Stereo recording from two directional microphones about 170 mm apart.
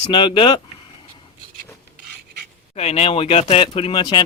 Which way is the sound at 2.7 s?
35° left (ahead or behind).